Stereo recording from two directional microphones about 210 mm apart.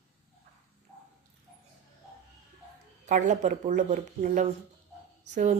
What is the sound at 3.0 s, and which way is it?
Speech, 35° right (ahead or behind).